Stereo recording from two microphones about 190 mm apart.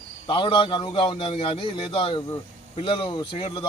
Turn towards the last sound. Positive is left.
turn(degrees=30)  # may be behind; listen again after turning